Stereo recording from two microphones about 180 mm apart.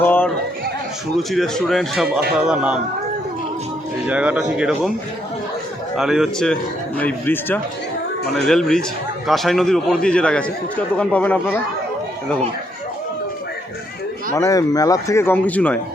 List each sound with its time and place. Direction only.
0.0 s chatter: 10° left (ahead or behind)
1.1 s a man's voice: centre (ahead or behind)
4.1 s a man's voice: 5° right (ahead or behind)
6.0 s a man's voice: centre (ahead or behind)
14.3 s speech: 20° left (ahead or behind)